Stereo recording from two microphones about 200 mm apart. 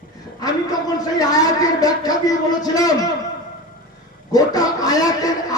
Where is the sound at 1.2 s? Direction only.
20° left (ahead or behind).